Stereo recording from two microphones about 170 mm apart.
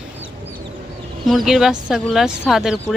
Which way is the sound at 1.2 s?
Centre (ahead or behind).